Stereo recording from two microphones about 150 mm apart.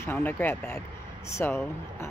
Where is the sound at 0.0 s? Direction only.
15° left (ahead or behind).